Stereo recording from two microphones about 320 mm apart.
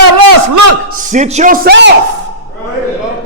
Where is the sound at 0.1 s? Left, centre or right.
Right.